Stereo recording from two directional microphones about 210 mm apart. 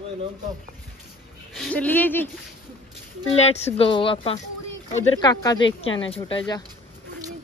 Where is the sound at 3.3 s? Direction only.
30° left (ahead or behind).